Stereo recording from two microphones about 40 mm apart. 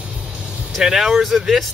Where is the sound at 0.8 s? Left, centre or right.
Centre.